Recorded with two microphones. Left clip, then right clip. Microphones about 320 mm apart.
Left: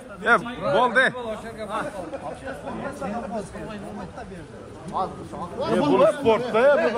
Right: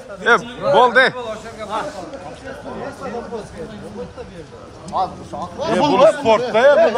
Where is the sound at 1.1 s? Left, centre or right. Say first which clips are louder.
Right 4 dB; right.